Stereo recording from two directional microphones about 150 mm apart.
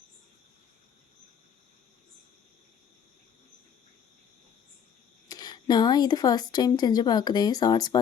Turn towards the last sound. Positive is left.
turn(degrees=25)  # may be behind; listen again after turning